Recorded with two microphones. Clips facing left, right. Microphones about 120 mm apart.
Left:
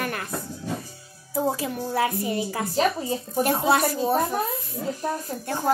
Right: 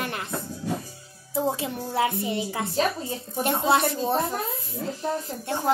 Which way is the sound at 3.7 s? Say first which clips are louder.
Right 2 dB; 25° right (ahead or behind).